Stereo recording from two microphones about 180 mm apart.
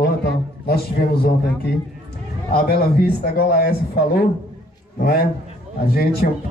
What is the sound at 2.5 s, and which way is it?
A man's voice, 55° left (ahead or behind).